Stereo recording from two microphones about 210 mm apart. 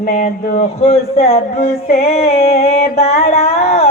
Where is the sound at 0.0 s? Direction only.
40° left (ahead or behind).